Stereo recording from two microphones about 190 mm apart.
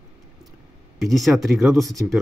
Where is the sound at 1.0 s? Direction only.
Centre (ahead or behind).